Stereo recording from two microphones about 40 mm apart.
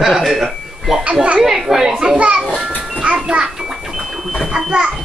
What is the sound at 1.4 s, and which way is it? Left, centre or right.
Speech, centre.